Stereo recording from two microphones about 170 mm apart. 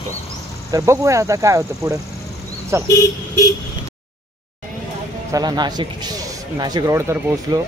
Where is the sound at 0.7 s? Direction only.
15° right (ahead or behind).